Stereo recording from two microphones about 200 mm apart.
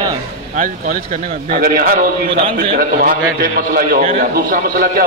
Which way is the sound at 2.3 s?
25° right (ahead or behind).